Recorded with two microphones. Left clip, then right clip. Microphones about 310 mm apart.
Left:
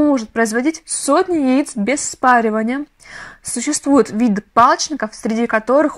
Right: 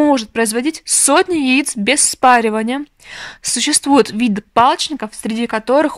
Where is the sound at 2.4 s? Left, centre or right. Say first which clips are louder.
Right 1 dB; centre.